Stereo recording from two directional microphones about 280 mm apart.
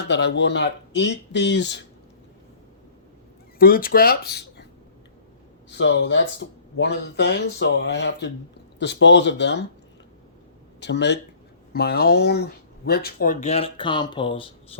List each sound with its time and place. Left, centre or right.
0.1 s speech: left
3.6 s speech: left
5.7 s speech: left
10.8 s speech: left; by 14.8 s centre